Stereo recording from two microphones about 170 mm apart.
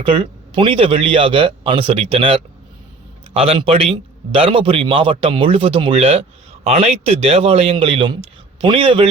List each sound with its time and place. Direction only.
0.0 s speech: 30° right (ahead or behind)